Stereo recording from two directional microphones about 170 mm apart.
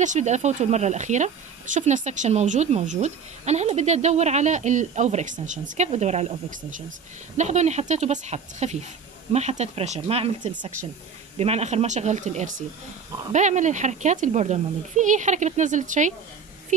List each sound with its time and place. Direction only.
0.0 s speech: 45° right (ahead or behind); by 10.7 s 30° right (ahead or behind)
11.3 s speech: 40° right (ahead or behind)